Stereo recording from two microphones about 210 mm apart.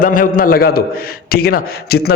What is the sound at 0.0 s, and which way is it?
Speech, 40° left (ahead or behind).